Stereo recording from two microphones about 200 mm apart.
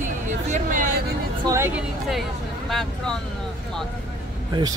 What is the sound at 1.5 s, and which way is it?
A woman's voice, 10° right (ahead or behind).